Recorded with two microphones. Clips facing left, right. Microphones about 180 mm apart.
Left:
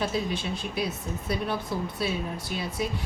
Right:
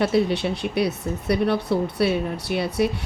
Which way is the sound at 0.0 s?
70° right (ahead or behind).